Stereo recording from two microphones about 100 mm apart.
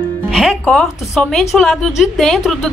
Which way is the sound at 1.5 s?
Centre (ahead or behind).